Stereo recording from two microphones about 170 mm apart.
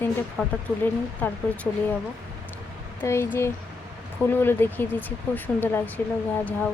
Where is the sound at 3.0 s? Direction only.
15° left (ahead or behind).